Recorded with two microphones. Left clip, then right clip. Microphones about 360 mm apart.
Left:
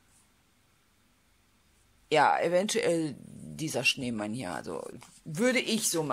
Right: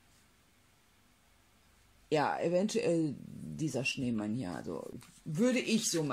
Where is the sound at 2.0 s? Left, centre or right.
Left.